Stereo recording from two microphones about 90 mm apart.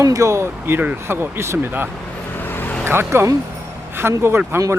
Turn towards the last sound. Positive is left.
turn(degrees=-30)  # may be behind; listen again after turning